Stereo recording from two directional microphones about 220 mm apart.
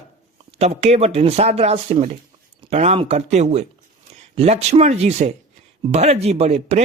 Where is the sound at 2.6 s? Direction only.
30° right (ahead or behind).